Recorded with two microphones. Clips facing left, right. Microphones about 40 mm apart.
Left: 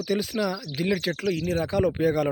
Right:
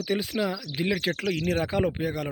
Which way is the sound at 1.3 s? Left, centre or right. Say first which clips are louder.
Left 1 dB; right.